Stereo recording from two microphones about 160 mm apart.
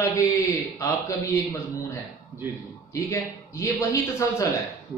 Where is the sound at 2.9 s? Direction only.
20° left (ahead or behind).